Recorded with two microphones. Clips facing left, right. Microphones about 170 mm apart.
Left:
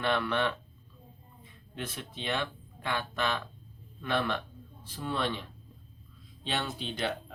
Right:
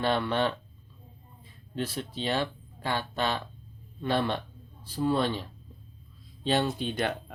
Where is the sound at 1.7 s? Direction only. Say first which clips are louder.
Right 7 dB; 35° right (ahead or behind).